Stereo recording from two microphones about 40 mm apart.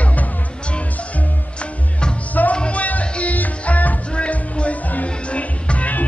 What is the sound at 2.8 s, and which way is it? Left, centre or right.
Music, left.